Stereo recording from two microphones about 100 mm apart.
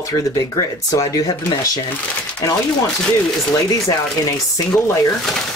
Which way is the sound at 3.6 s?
35° left (ahead or behind).